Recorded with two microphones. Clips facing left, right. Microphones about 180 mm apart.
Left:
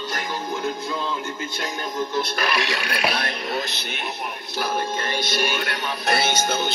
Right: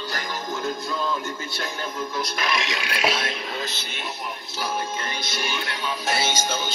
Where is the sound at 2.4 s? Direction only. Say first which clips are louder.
Left 2 dB; 60° left (ahead or behind).